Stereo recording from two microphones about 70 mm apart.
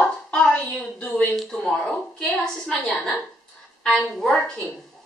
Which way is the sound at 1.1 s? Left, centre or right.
Centre.